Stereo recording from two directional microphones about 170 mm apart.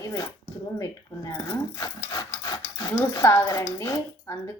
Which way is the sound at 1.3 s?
15° left (ahead or behind).